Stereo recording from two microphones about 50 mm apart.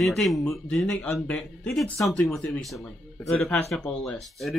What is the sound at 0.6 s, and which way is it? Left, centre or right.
Speech, left.